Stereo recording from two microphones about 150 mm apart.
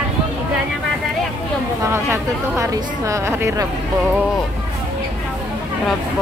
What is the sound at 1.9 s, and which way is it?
Speech, 20° right (ahead or behind).